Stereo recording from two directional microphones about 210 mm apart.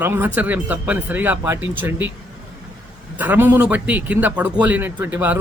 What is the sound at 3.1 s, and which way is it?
Speech, 10° right (ahead or behind).